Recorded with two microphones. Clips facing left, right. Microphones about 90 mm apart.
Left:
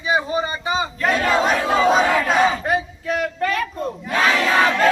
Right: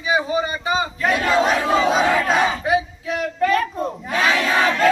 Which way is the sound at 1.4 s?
Centre (ahead or behind).